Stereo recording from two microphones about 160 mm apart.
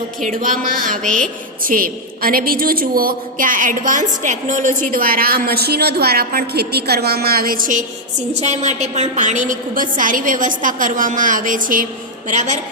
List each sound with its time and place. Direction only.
0.9 s a woman's voice: 55° right (ahead or behind)
8.3 s a woman's voice: 45° right (ahead or behind)